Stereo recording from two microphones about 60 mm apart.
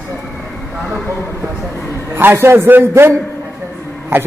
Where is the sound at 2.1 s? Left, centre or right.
Right.